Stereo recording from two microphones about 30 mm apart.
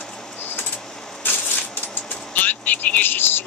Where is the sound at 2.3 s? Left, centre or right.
Left.